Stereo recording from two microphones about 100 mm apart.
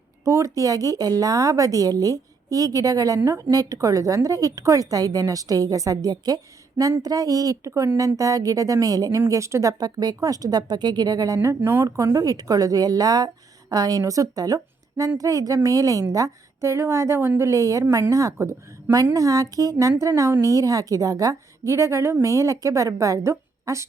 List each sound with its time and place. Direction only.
0.3 s a woman's voice: 30° right (ahead or behind)
7.7 s speech: 25° right (ahead or behind)
7.9 s a woman's voice: 35° right (ahead or behind)
11.4 s a woman's voice: 25° right (ahead or behind)
23.3 s a sound: 30° right (ahead or behind)